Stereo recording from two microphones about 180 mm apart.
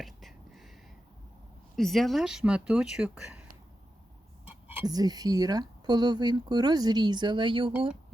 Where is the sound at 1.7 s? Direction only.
Centre (ahead or behind).